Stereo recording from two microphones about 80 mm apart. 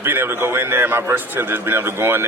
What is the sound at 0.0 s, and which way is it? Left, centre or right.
A man's voice, right.